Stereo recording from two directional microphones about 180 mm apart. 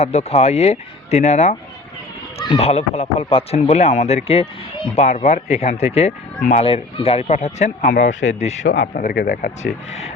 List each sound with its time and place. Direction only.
0.0 s speech: 35° left (ahead or behind)
9.1 s speech: 55° left (ahead or behind)